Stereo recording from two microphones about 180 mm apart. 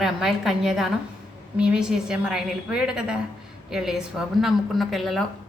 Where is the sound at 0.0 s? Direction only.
Centre (ahead or behind).